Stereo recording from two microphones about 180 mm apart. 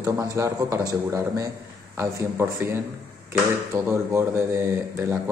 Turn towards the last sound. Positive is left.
turn(degrees=-15)  # may be behind; listen again after turning